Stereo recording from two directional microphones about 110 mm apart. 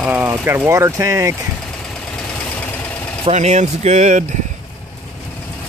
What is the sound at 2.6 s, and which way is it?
Vehicle, 15° left (ahead or behind).